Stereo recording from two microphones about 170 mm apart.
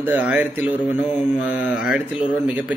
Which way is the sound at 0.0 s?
10° right (ahead or behind).